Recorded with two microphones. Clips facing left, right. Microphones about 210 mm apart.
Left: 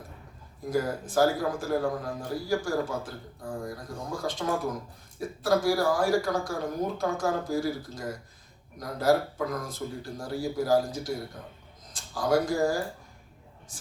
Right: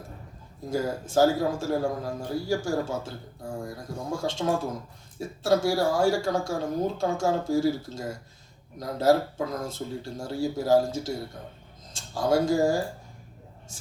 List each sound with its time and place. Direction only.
0.7 s a man's voice: 25° right (ahead or behind)